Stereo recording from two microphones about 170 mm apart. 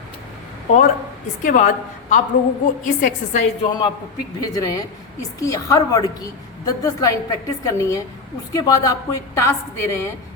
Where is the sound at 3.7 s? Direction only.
25° left (ahead or behind).